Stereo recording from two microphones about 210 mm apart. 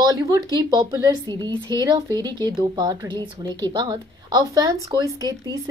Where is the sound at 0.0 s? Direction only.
15° right (ahead or behind).